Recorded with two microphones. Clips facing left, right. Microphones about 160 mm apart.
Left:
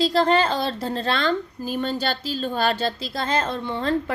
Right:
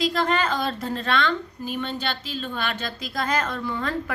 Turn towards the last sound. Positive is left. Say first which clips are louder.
# left 4 dB
turn(degrees=30)  # may be behind; listen again after turning